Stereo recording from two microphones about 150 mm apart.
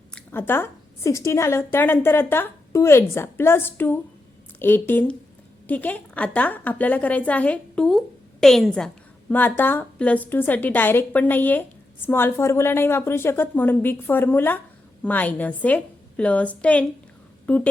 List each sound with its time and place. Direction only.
0.1 s a woman's voice: 15° left (ahead or behind)